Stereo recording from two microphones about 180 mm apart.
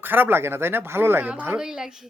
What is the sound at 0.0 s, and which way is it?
A woman's voice, 10° right (ahead or behind).